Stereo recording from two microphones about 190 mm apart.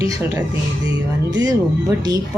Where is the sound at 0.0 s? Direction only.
15° right (ahead or behind).